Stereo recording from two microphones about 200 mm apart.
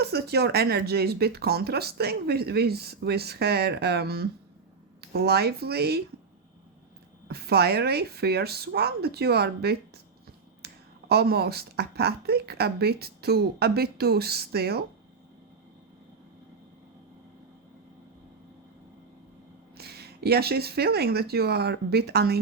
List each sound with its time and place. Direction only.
0.0 s speech: 50° right (ahead or behind)
7.3 s speech: 50° right (ahead or behind)
10.6 s finger snapping: 50° right (ahead or behind)
11.1 s speech: 50° right (ahead or behind)
19.7 s speech: 50° right (ahead or behind)